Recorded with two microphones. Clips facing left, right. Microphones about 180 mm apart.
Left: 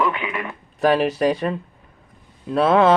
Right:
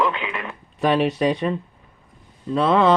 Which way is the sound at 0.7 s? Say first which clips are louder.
Left 1 dB; centre (ahead or behind).